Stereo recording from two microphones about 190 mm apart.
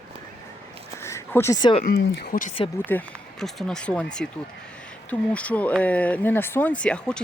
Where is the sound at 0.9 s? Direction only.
15° left (ahead or behind).